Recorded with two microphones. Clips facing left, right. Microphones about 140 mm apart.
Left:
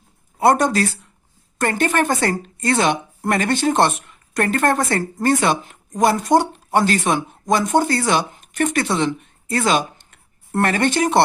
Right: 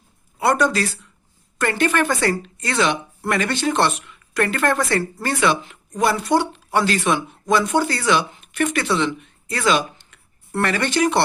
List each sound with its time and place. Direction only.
0.3 s speech: 50° left (ahead or behind)